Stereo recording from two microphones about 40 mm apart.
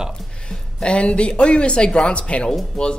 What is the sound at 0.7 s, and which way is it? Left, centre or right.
Speech, left.